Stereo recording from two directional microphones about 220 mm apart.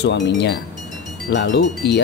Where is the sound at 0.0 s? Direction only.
50° left (ahead or behind).